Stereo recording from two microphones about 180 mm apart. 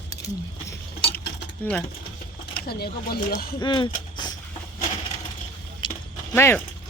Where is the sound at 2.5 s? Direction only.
60° left (ahead or behind).